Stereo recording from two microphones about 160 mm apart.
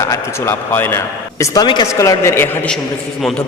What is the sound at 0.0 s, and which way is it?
A man's voice, 20° left (ahead or behind).